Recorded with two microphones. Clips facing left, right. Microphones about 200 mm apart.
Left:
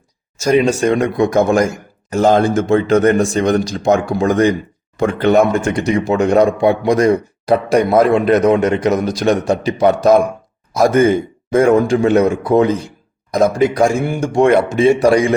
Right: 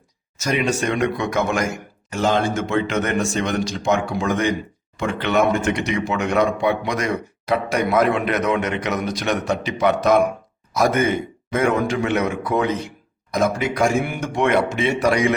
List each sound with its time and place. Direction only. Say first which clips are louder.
0.4 s speech: left 8 dB; 35° left (ahead or behind)